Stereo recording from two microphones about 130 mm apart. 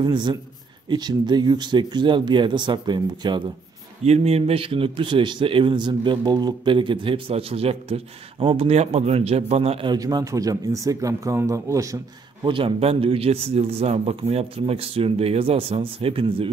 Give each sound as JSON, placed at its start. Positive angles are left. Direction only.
{"t": 0.0, "sound": "speech", "side_deg": -35}
{"t": 4.0, "sound": "a man's voice", "side_deg": -50}
{"t": 9.8, "sound": "speech", "side_deg": -30}
{"t": 12.4, "sound": "a man's voice", "side_deg": -40}